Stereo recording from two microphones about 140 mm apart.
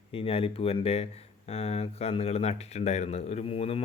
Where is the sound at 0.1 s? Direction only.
45° left (ahead or behind).